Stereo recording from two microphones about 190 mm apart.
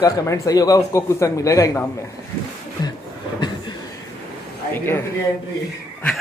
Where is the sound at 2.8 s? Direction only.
20° left (ahead or behind).